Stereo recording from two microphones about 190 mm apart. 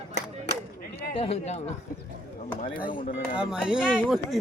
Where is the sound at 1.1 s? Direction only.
30° left (ahead or behind).